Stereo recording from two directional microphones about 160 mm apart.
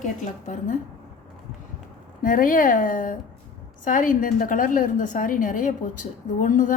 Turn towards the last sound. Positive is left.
turn(degrees=55)  # may be behind; listen again after turning